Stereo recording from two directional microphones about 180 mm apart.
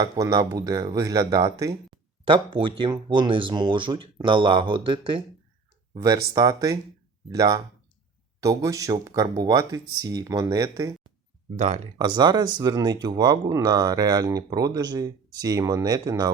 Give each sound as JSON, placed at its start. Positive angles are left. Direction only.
{"t": 0.0, "sound": "speech", "side_deg": -20}
{"t": 11.5, "sound": "speech", "side_deg": -40}
{"t": 11.9, "sound": "speech", "side_deg": -25}